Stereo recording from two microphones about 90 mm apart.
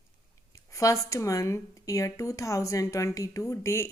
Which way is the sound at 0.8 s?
40° left (ahead or behind).